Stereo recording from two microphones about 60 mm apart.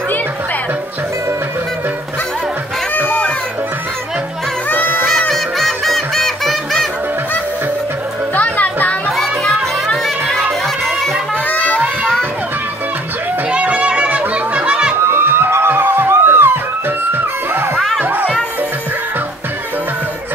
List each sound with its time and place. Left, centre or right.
3.0 s a sound: left
4.6 s music: left
5.3 s music: centre
8.4 s music: left
10.0 s crowd: centre
11.4 s music: left
13.5 s children playing: centre
15.0 s music: right
17.7 s music: centre
18.0 s children playing: right